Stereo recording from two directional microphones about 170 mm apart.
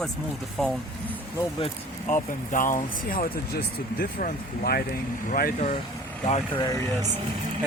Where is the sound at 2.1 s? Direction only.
50° left (ahead or behind).